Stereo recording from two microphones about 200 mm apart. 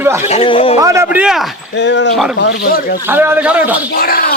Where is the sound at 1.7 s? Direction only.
60° left (ahead or behind).